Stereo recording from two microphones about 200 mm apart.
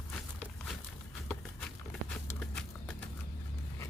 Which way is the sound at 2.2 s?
5° left (ahead or behind).